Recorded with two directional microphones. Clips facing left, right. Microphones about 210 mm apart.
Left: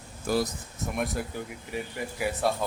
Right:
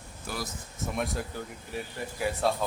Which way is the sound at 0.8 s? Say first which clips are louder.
Left 1 dB; centre (ahead or behind).